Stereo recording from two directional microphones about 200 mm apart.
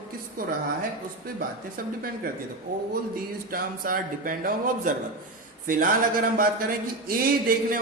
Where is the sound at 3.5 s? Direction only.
45° right (ahead or behind).